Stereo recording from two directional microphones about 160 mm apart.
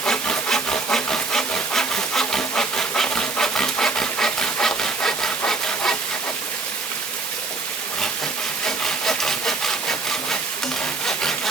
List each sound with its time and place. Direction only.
0.0 s wood: 5° left (ahead or behind)
8.6 s sawing: 5° left (ahead or behind)
11.0 s wood: 5° left (ahead or behind)